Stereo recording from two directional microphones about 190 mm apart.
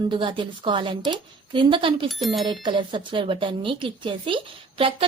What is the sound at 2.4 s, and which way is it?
A woman's voice, 25° right (ahead or behind).